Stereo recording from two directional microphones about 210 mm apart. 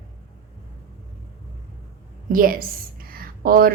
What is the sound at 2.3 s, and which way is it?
Speech, 40° right (ahead or behind).